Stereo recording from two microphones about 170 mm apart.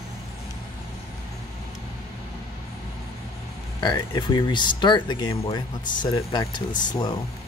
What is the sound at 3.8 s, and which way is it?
Speech, 25° left (ahead or behind).